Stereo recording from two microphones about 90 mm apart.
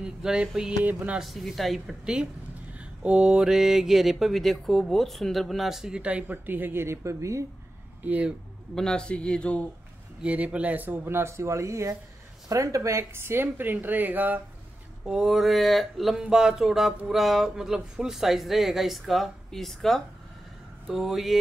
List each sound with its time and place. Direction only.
0.0 s mantra: 10° right (ahead or behind)
0.6 s speech: 15° right (ahead or behind)
1.2 s mantra: centre (ahead or behind); by 7.4 s 35° right (ahead or behind)
8.0 s speech: 15° right (ahead or behind)
8.7 s speech: 10° left (ahead or behind)
10.2 s speech: 15° right (ahead or behind)
15.0 s mantra: 5° right (ahead or behind)